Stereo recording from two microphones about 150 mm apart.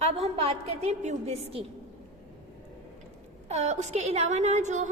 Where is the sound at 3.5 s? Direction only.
50° right (ahead or behind).